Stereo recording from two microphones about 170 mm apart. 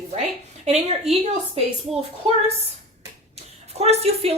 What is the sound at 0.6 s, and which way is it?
Speech, 40° right (ahead or behind).